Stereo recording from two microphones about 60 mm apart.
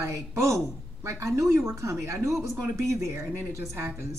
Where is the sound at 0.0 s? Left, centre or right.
Right.